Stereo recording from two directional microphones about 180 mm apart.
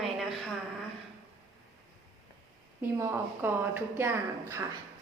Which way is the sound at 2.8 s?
10° right (ahead or behind).